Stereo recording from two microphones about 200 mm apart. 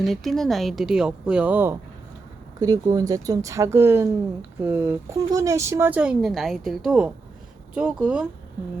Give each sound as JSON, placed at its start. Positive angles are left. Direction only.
{"t": 0.0, "sound": "speech", "side_deg": 0}